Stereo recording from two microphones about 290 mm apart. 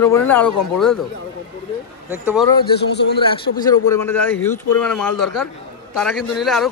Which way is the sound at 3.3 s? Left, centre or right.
Centre.